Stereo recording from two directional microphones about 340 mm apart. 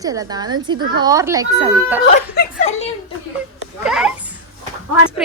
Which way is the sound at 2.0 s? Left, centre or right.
Left.